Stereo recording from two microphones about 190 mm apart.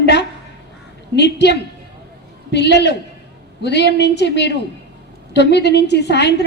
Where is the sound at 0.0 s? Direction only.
65° left (ahead or behind).